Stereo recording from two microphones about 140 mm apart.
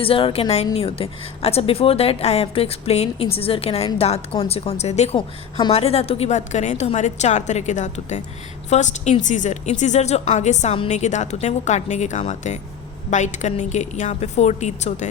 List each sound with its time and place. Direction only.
0.0 s a woman's voice: 40° left (ahead or behind); by 15.1 s 55° left (ahead or behind)